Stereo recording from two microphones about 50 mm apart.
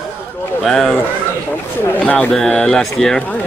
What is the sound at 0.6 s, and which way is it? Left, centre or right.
Speech, centre.